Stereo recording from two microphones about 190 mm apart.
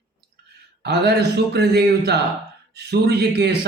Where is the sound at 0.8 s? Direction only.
60° right (ahead or behind).